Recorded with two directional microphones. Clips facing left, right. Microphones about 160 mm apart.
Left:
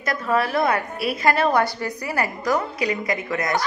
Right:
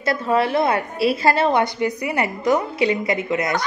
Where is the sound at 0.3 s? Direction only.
25° right (ahead or behind).